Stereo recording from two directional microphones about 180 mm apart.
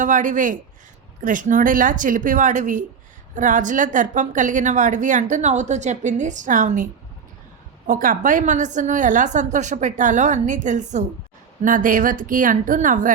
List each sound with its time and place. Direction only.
0.0 s a woman's voice: 45° right (ahead or behind)
7.9 s a woman's voice: 50° right (ahead or behind)